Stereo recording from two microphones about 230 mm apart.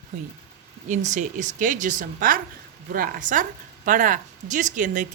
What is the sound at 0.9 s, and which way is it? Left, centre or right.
Speech, right.